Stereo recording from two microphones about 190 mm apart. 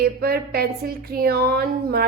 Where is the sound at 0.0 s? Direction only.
55° right (ahead or behind).